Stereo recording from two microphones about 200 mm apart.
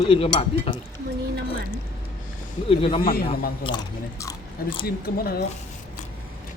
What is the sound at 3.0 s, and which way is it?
Speech, 45° left (ahead or behind).